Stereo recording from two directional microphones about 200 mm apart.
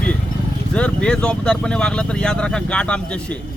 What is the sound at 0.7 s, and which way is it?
A man's voice, 5° left (ahead or behind).